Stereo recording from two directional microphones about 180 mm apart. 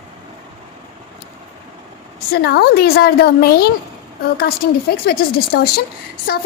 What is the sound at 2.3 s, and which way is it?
A woman's voice, 65° left (ahead or behind).